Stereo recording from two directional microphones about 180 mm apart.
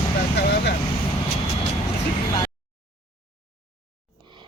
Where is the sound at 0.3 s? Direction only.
70° left (ahead or behind).